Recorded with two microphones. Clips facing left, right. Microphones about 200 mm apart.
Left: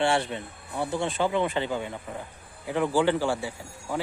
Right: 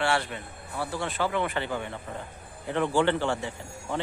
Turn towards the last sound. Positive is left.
turn(degrees=10)  # may be behind; listen again after turning